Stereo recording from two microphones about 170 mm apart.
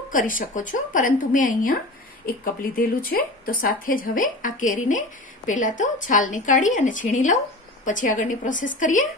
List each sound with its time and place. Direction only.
0.1 s a woman's voice: 50° left (ahead or behind)
3.0 s a woman's voice: 55° left (ahead or behind)